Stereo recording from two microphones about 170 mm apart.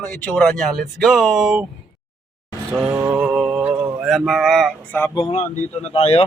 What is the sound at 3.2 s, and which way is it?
Music, 5° right (ahead or behind).